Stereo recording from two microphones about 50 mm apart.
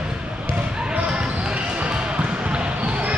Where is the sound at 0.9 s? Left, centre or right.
Right.